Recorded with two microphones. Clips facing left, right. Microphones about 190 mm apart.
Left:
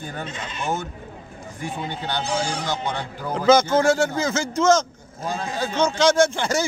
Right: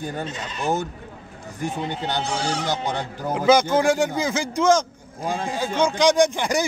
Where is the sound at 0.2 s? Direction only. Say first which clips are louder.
Right 2 dB; 40° right (ahead or behind).